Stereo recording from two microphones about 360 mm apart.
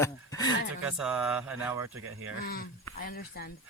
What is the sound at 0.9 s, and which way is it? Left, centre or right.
Speech, centre.